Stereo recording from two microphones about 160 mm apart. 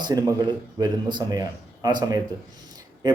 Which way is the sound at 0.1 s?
25° right (ahead or behind).